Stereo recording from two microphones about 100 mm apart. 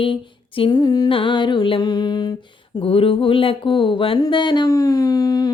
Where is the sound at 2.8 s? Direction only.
70° left (ahead or behind).